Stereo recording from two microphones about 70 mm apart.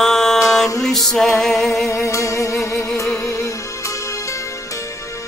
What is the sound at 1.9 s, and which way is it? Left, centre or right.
Music, left.